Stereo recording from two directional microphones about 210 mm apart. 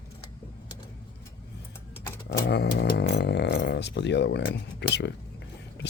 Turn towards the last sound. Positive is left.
turn(degrees=55)  # may be behind; listen again after turning